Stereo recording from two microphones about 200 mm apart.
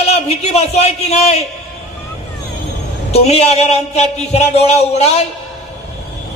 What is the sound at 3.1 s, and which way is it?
A man's voice, 30° left (ahead or behind).